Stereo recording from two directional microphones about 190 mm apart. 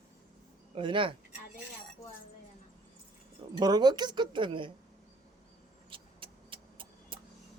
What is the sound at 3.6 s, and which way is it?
Speech, 20° right (ahead or behind).